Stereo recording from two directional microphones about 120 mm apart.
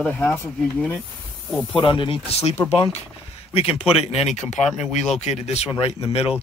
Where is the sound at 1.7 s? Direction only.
45° left (ahead or behind).